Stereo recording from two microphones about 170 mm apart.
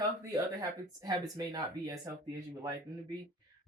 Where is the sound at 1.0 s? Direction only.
25° right (ahead or behind).